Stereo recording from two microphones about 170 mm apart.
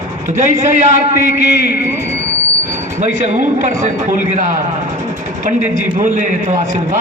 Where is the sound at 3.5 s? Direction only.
45° right (ahead or behind).